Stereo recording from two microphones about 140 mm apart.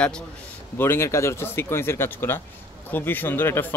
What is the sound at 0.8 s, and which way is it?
Speech, 15° left (ahead or behind).